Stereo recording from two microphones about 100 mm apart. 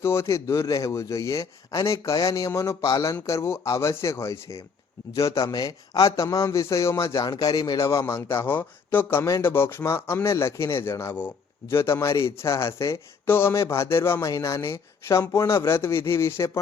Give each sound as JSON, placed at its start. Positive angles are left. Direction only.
{"t": 0.0, "sound": "a man's voice", "side_deg": 25}